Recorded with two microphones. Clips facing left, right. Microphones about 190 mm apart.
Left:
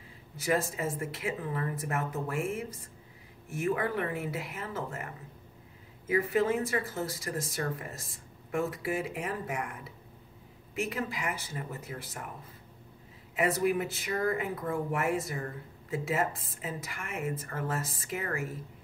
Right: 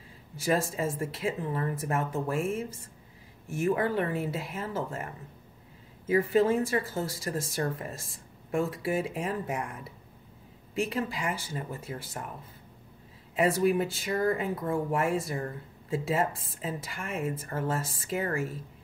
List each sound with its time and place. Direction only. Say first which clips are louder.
0.4 s speech: right 2 dB; 25° right (ahead or behind)
6.3 s speech: right 4 dB; 30° right (ahead or behind)
10.7 s speech: right 3 dB; 30° right (ahead or behind)
13.4 s speech: right 3 dB; 30° right (ahead or behind)